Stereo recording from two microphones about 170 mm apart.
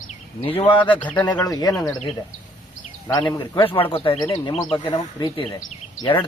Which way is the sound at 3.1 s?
25° left (ahead or behind).